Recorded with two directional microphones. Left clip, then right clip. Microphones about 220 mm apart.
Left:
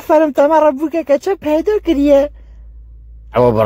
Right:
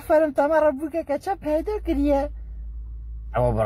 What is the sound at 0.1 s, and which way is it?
Speech, 40° left (ahead or behind).